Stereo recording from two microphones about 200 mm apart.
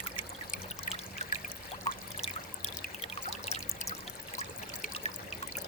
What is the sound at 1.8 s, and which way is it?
Pour, 35° left (ahead or behind).